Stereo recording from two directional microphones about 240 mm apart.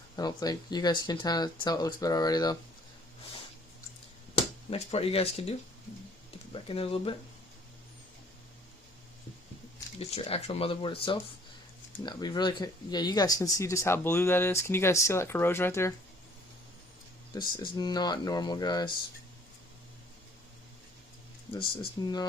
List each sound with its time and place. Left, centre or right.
0.2 s speech: centre
4.7 s speech: left
10.0 s speech: left
17.6 s speech: centre
21.5 s speech: left